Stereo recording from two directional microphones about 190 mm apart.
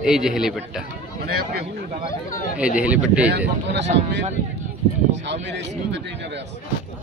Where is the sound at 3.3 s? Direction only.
60° right (ahead or behind).